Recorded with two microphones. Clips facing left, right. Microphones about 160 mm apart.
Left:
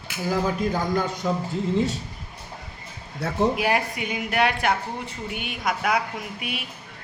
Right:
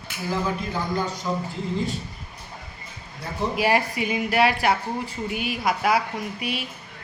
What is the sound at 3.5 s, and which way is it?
Speech, centre (ahead or behind).